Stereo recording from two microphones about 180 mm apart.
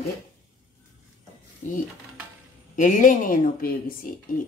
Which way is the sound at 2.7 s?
45° left (ahead or behind).